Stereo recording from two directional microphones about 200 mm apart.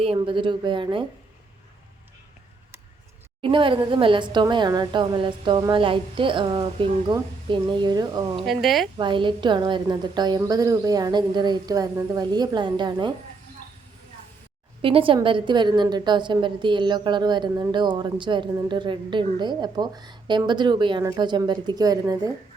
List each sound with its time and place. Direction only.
0.0 s a woman's voice: 25° right (ahead or behind)
3.4 s a woman's voice: 25° right (ahead or behind)
8.4 s speech: centre (ahead or behind)
9.0 s a woman's voice: 25° right (ahead or behind)
14.8 s a woman's voice: 25° right (ahead or behind)